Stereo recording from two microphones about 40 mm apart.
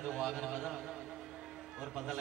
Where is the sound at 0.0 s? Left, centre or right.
Centre.